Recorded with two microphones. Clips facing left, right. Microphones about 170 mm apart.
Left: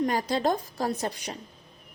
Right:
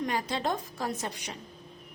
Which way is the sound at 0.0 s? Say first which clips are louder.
Left 5 dB; 40° left (ahead or behind).